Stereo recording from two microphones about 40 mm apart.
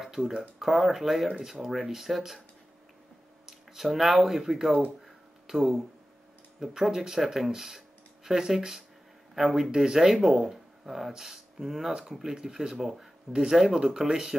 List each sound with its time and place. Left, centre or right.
0.0 s speech: centre
3.4 s speech: centre
5.0 s a sound: centre
6.8 s speech: centre
13.3 s speech: right
13.6 s speech: centre